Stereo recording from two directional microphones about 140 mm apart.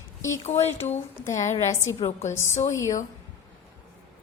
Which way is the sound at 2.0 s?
50° left (ahead or behind).